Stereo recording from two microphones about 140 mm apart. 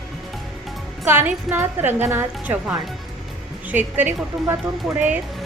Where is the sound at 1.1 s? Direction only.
15° right (ahead or behind).